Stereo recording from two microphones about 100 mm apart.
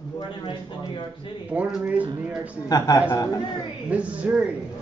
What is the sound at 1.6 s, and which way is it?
Speech, 15° right (ahead or behind).